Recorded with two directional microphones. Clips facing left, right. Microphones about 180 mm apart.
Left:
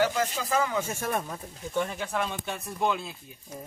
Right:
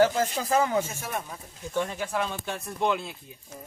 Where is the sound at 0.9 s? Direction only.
50° left (ahead or behind).